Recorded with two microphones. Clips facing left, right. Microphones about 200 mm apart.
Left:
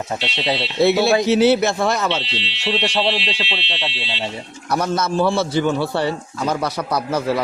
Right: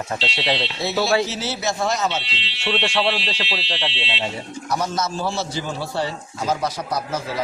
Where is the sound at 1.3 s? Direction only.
60° left (ahead or behind).